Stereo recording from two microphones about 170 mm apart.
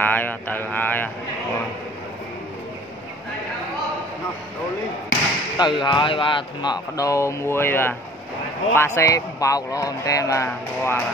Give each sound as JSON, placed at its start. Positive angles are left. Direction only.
{"t": 0.0, "sound": "speech", "side_deg": 10}
{"t": 5.6, "sound": "speech", "side_deg": 25}